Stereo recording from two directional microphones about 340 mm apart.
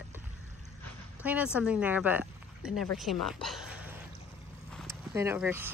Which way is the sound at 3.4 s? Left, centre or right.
Centre.